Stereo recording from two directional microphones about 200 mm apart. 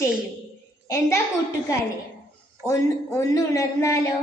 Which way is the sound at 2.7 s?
15° left (ahead or behind).